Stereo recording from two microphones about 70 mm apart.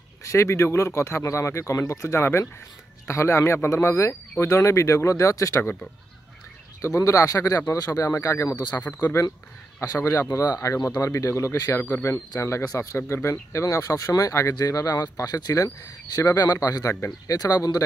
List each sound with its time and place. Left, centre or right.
0.2 s speech: left
6.8 s speech: left
8.7 s speech: left
9.8 s a man's voice: left
11.0 s speech: left
11.5 s a man's voice: left
11.8 s speech: left
12.4 s a man's voice: left